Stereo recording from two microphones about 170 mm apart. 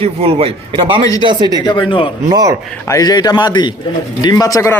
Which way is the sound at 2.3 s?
20° right (ahead or behind).